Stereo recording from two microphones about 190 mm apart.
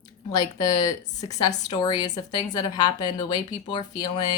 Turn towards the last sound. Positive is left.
turn(degrees=20)  # may be behind; listen again after turning